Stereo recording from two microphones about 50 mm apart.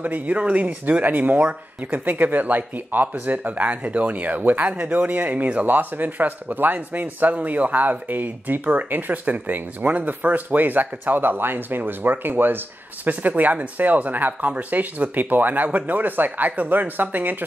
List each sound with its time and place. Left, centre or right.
0.0 s speech: right